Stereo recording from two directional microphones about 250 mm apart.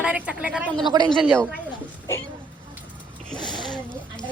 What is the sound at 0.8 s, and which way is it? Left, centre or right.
Speech, centre.